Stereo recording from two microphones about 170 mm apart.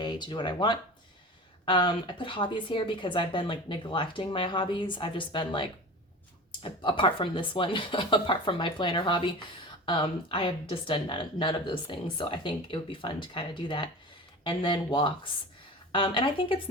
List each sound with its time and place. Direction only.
0.0 s speech: 25° left (ahead or behind)